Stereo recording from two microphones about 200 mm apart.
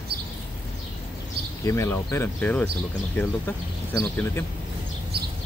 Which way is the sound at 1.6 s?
15° left (ahead or behind).